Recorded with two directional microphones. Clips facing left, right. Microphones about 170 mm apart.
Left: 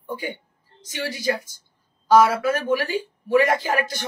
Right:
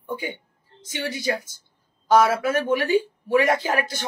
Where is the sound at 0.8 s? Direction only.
20° right (ahead or behind).